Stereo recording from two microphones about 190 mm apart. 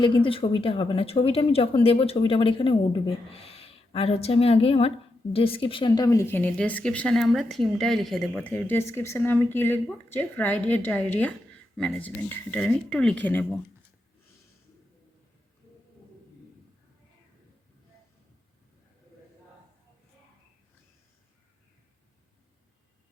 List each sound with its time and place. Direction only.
0.0 s a woman's voice: 25° left (ahead or behind); by 13.6 s 5° left (ahead or behind)